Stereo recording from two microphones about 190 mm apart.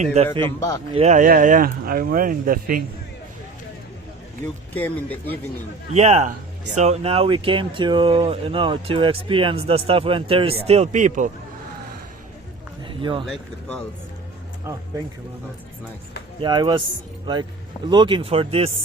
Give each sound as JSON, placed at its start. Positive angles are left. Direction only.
{"t": 0.0, "sound": "speech", "side_deg": -35}
{"t": 0.4, "sound": "speech", "side_deg": 15}
{"t": 0.9, "sound": "speech", "side_deg": -40}
{"t": 4.7, "sound": "speech", "side_deg": 10}
{"t": 5.9, "sound": "speech", "side_deg": -35}
{"t": 12.8, "sound": "a sound", "side_deg": -25}
{"t": 13.2, "sound": "speech", "side_deg": 5}
{"t": 16.4, "sound": "speech", "side_deg": -20}
{"t": 17.8, "sound": "speech", "side_deg": -25}